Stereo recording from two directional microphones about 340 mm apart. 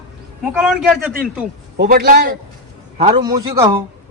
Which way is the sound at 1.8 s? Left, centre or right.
Right.